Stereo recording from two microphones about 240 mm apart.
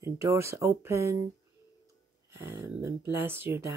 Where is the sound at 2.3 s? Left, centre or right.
Centre.